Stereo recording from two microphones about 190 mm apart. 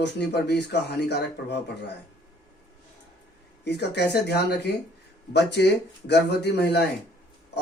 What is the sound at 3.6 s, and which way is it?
Speech, 60° left (ahead or behind).